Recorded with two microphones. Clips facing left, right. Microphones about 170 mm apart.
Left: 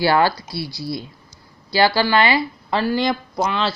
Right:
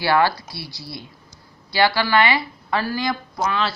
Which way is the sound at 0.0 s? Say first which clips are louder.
Left 2 dB; 30° left (ahead or behind).